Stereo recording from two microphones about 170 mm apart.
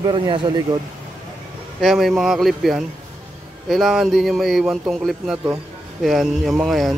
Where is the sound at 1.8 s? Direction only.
Centre (ahead or behind).